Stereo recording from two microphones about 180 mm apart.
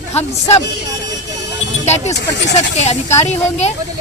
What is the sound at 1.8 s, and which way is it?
Speech, 40° left (ahead or behind).